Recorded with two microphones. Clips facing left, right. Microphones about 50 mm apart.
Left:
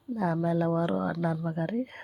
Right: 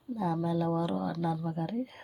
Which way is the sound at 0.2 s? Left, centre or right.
Left.